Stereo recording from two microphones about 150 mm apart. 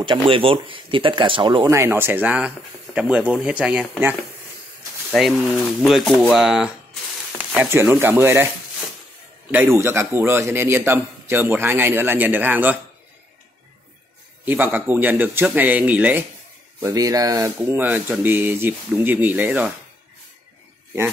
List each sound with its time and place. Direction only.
0.0 s speech: 35° right (ahead or behind)
1.7 s a man's voice: 15° right (ahead or behind)
5.1 s speech: centre (ahead or behind)
9.5 s a man's voice: 15° right (ahead or behind)
14.4 s a man's voice: 10° right (ahead or behind)
16.8 s a man's voice: 25° right (ahead or behind)